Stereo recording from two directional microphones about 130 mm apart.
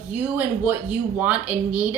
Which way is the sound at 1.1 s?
10° right (ahead or behind).